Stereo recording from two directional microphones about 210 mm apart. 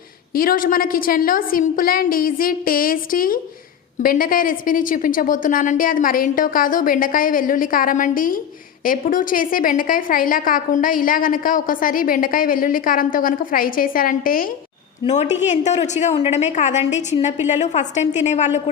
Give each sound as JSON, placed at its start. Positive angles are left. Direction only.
{"t": 0.3, "sound": "a woman's voice", "side_deg": 40}
{"t": 15.0, "sound": "a woman's voice", "side_deg": 30}